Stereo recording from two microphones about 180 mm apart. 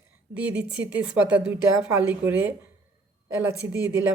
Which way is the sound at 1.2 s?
10° right (ahead or behind).